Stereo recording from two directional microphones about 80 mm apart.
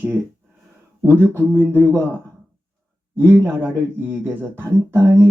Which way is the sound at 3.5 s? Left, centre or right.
Right.